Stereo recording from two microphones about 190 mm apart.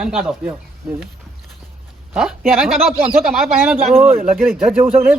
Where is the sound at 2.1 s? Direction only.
5° right (ahead or behind).